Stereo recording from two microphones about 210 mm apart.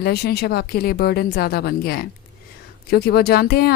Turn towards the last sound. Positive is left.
turn(degrees=50)  # may be behind; listen again after turning